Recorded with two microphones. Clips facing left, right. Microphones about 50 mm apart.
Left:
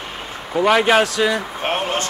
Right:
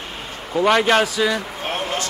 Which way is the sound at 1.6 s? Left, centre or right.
Left.